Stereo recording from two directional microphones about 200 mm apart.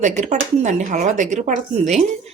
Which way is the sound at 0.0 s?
35° right (ahead or behind).